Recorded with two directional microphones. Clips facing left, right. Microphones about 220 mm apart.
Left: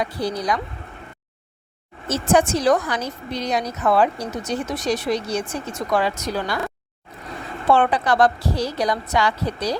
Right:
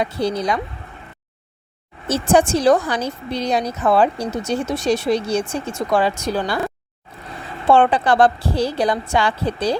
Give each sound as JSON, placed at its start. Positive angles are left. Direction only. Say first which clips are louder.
{"t": 0.0, "sound": "a woman's voice", "louder": "right 4 dB", "side_deg": -25}
{"t": 2.0, "sound": "a woman's voice", "louder": "right 2 dB", "side_deg": -30}
{"t": 7.7, "sound": "a woman's voice", "louder": "right 3 dB", "side_deg": -30}